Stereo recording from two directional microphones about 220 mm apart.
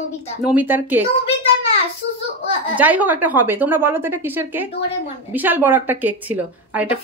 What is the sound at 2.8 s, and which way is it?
A woman's voice, 5° right (ahead or behind).